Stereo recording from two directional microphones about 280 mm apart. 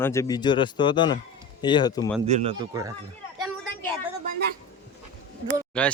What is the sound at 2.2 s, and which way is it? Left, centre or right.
Speech, right.